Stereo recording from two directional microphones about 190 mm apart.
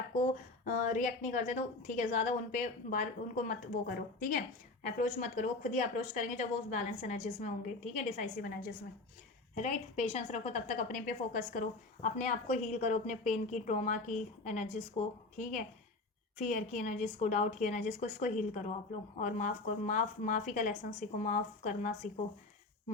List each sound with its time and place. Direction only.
0.1 s a woman's voice: 40° left (ahead or behind)
4.9 s a woman's voice: 40° left (ahead or behind)
9.6 s a woman's voice: 35° left (ahead or behind)